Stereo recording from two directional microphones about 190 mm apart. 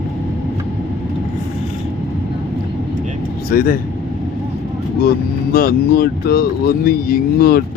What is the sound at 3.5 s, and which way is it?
Speech, 50° left (ahead or behind).